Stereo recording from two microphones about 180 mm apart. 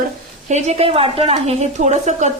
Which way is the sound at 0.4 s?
40° right (ahead or behind).